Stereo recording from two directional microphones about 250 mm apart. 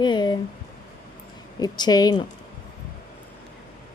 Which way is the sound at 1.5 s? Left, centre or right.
Centre.